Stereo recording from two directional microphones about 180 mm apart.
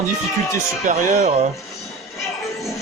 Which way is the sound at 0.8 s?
45° right (ahead or behind).